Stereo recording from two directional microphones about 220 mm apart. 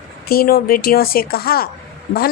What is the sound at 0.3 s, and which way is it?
A woman's voice, 40° left (ahead or behind).